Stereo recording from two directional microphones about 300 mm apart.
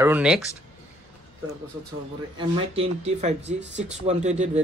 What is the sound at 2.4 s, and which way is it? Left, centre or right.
Speech, centre.